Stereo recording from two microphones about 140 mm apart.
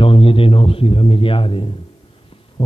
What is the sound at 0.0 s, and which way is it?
A man's voice, 40° left (ahead or behind).